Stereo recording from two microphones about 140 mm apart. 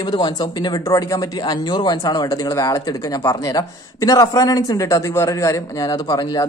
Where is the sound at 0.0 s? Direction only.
30° left (ahead or behind).